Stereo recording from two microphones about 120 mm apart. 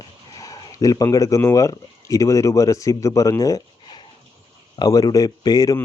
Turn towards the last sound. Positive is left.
turn(degrees=30)  # may be behind; listen again after turning